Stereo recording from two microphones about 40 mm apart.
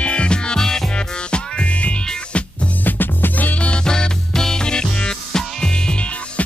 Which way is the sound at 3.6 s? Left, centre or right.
Left.